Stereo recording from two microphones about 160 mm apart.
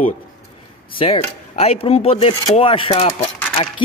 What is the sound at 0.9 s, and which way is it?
A man's voice, 35° left (ahead or behind).